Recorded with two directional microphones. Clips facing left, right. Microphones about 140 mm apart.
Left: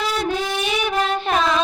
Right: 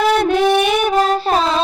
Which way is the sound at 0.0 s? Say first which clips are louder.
Right 9 dB; 60° right (ahead or behind).